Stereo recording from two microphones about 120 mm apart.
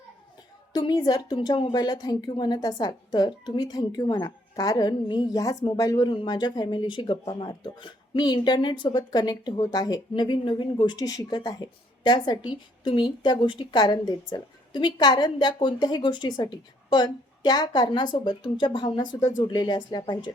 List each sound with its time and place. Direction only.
0.7 s speech: 35° left (ahead or behind)